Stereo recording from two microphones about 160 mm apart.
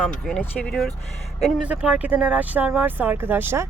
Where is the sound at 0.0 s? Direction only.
5° left (ahead or behind).